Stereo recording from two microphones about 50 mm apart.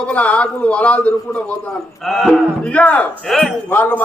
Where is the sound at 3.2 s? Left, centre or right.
Centre.